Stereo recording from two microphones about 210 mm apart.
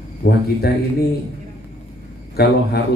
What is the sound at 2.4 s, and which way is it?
Speech, 50° left (ahead or behind).